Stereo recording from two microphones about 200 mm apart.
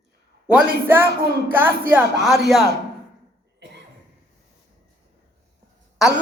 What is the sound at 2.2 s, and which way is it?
Speech, centre (ahead or behind).